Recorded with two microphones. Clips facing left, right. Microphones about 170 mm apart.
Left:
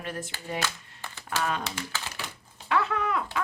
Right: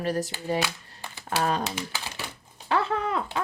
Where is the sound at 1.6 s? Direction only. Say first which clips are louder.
Right 3 dB; 20° right (ahead or behind).